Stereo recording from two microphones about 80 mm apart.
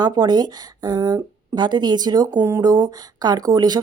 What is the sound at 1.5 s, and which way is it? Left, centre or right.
Speech, right.